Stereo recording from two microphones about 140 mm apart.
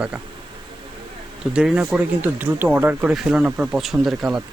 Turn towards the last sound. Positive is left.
turn(degrees=0)  # may be behind; listen again after turning